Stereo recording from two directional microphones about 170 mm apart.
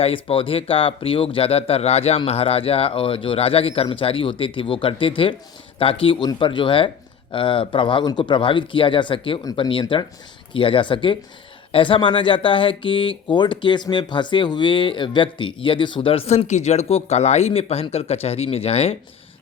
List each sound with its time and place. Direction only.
0.0 s speech: 35° left (ahead or behind)